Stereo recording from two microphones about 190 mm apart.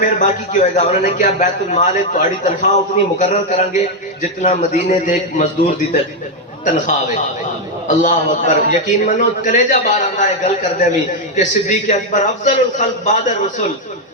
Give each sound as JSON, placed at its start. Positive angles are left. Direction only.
{"t": 0.0, "sound": "a man's voice", "side_deg": 40}